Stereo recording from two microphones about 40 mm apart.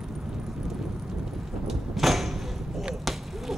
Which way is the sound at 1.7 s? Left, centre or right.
Centre.